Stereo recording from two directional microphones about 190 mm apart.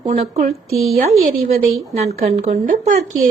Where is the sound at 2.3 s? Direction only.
35° right (ahead or behind).